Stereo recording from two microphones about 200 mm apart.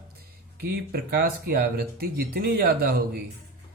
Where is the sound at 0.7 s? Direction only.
50° right (ahead or behind).